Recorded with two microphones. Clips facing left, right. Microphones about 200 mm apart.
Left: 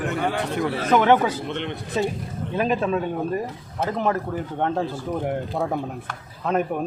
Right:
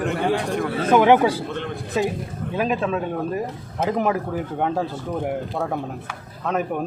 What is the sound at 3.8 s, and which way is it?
A man's voice, 15° right (ahead or behind).